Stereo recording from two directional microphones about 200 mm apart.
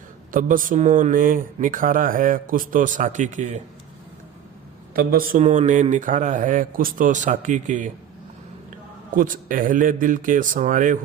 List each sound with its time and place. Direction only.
0.3 s speech: 45° right (ahead or behind)
4.9 s a man's voice: 45° right (ahead or behind)
9.1 s a man's voice: 40° right (ahead or behind)